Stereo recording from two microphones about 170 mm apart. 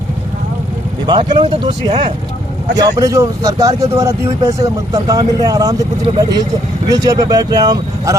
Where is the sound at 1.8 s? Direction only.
40° right (ahead or behind).